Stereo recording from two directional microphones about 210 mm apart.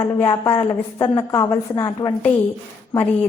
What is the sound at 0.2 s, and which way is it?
A woman's voice, 20° left (ahead or behind).